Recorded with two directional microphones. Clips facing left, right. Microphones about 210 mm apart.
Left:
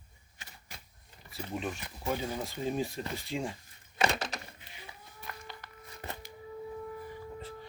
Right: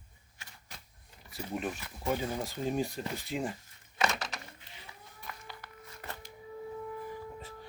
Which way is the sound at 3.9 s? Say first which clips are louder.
Left 2 dB; 30° left (ahead or behind).